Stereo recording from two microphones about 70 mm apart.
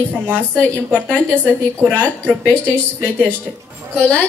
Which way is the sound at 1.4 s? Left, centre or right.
Right.